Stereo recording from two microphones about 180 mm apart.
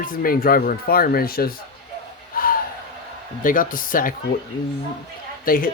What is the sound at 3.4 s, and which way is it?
Speech, 50° left (ahead or behind).